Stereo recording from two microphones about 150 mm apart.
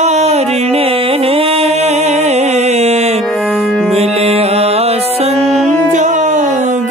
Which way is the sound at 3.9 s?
45° right (ahead or behind).